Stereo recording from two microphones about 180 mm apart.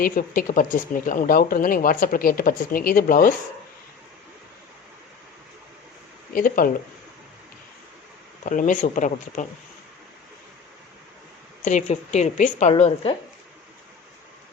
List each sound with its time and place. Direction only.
0.0 s speech: 50° left (ahead or behind)
6.3 s speech: 55° left (ahead or behind)
8.4 s speech: 45° left (ahead or behind)
11.6 s a woman's voice: 40° left (ahead or behind)